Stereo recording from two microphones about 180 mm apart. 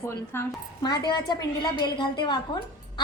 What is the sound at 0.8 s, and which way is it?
A woman's voice, 25° left (ahead or behind).